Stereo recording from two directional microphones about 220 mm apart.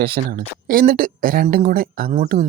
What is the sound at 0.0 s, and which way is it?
Speech, 45° right (ahead or behind).